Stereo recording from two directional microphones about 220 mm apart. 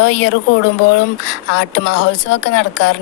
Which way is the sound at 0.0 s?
55° left (ahead or behind).